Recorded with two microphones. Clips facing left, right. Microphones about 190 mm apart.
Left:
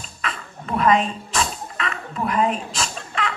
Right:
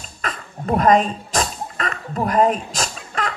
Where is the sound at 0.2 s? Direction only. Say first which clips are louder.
Right 2 dB; 40° right (ahead or behind).